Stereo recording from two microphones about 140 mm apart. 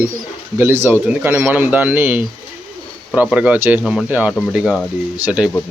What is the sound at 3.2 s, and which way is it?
Speech, 10° right (ahead or behind).